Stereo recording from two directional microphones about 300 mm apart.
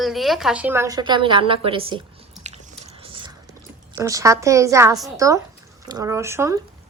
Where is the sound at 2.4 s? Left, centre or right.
Right.